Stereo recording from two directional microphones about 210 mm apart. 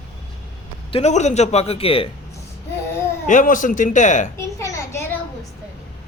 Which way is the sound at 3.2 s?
40° left (ahead or behind).